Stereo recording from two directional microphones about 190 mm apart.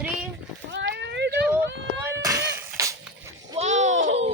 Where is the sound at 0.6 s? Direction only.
70° right (ahead or behind).